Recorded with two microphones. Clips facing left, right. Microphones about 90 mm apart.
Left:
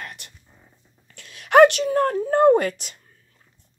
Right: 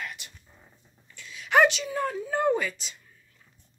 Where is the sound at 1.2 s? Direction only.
65° left (ahead or behind).